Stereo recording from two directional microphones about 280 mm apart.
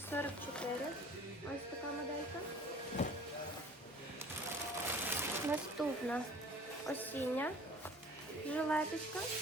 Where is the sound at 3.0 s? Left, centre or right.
Left.